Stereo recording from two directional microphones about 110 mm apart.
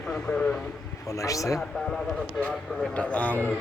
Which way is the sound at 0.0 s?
15° left (ahead or behind).